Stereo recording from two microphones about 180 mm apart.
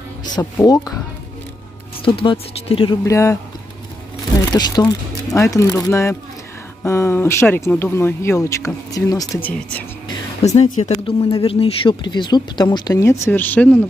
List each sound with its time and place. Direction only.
0.4 s speech: 20° left (ahead or behind)
2.0 s speech: 30° left (ahead or behind)
3.1 s speech: 15° left (ahead or behind)
4.5 s speech: 25° left (ahead or behind)
9.4 s speech: 10° left (ahead or behind)
10.4 s speech: 40° left (ahead or behind); by 13.8 s 10° left (ahead or behind)